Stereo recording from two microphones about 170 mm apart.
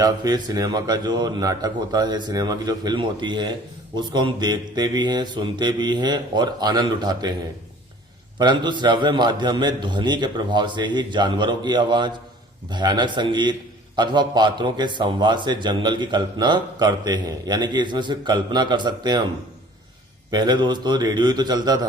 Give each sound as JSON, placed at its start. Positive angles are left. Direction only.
{"t": 0.0, "sound": "a man's voice", "side_deg": -25}
{"t": 8.4, "sound": "a man's voice", "side_deg": -25}
{"t": 20.3, "sound": "a man's voice", "side_deg": -25}